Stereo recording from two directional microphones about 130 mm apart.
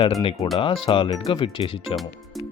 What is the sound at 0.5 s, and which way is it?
Speech, 40° left (ahead or behind).